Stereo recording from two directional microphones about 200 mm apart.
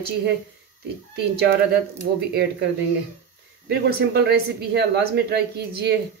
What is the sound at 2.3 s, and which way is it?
Speech, 60° right (ahead or behind).